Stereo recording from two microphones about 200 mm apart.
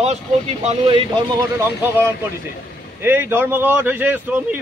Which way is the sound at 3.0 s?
10° right (ahead or behind).